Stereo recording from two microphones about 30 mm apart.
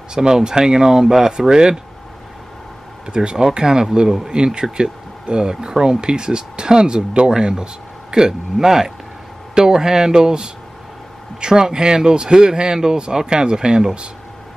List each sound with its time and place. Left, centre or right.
0.1 s speech: right
3.1 s speech: right